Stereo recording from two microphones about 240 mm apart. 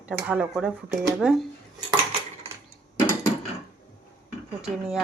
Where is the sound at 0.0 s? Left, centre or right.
Centre.